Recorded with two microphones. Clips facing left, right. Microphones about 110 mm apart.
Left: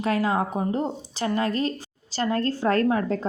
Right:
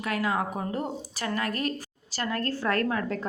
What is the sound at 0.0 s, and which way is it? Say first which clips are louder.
A woman's voice: left 5 dB; 30° left (ahead or behind).